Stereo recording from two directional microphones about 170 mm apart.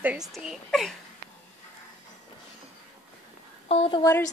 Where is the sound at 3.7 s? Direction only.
35° left (ahead or behind).